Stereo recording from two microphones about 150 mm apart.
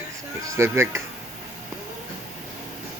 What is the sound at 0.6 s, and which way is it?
Speech, 20° right (ahead or behind).